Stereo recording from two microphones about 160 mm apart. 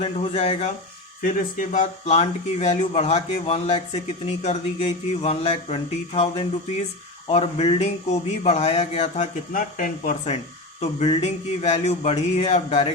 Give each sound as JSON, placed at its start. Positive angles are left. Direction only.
{"t": 0.0, "sound": "speech", "side_deg": 40}
{"t": 1.2, "sound": "a man's voice", "side_deg": 55}
{"t": 10.8, "sound": "speech", "side_deg": 40}